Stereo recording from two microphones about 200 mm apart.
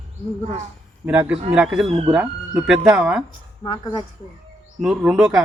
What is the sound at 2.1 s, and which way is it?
A man's voice, 5° right (ahead or behind).